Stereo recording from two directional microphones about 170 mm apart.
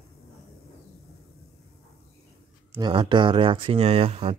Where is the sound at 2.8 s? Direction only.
30° right (ahead or behind).